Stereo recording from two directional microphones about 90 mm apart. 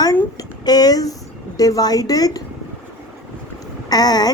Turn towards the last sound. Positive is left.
turn(degrees=50)  # may be behind; listen again after turning